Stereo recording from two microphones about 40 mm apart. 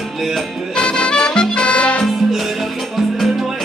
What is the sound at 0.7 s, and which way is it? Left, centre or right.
Music, left.